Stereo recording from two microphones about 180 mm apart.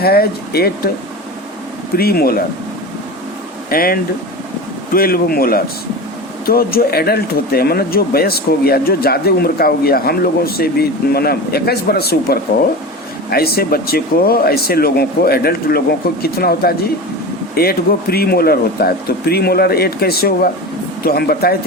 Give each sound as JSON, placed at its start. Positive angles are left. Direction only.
{"t": 0.0, "sound": "speech", "side_deg": 60}
{"t": 2.0, "sound": "speech", "side_deg": 60}
{"t": 3.7, "sound": "speech", "side_deg": 55}